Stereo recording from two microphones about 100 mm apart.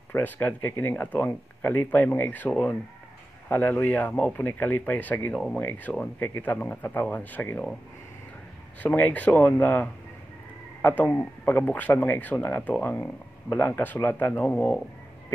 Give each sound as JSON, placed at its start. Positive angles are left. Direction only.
{"t": 0.1, "sound": "speech", "side_deg": 20}
{"t": 5.3, "sound": "speech", "side_deg": 5}
{"t": 5.6, "sound": "speech", "side_deg": 20}
{"t": 8.8, "sound": "speech", "side_deg": 15}